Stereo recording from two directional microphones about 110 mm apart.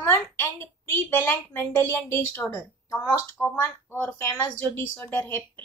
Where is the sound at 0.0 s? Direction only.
20° left (ahead or behind).